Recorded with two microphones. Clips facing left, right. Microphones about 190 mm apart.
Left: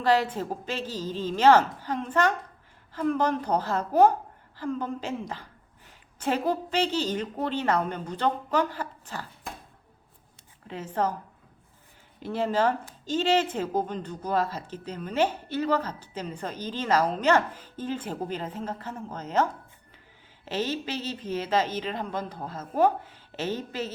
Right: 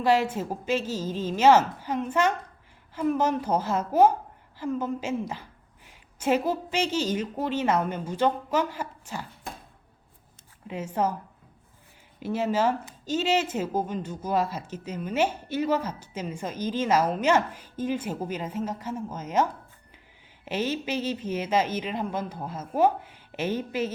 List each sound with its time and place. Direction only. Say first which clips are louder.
0.0 s a woman's voice: right 1 dB; 10° right (ahead or behind)
0.8 s a woman's voice: right 2 dB; 45° right (ahead or behind)
1.3 s a woman's voice: even; 10° right (ahead or behind)
10.7 s a woman's voice: right 1 dB; 10° right (ahead or behind)
12.2 s a woman's voice: even; 10° right (ahead or behind)